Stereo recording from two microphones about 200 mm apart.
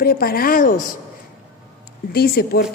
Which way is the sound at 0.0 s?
50° left (ahead or behind).